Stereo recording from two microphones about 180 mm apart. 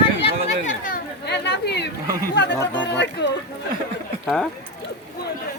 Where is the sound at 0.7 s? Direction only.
50° left (ahead or behind).